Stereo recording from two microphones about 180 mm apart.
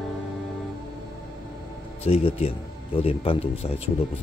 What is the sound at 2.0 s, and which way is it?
A man's voice, 35° left (ahead or behind).